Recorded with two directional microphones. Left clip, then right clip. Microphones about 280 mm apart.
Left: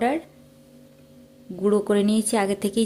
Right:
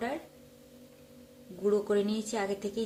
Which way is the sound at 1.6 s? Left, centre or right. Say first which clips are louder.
Left 7 dB; left.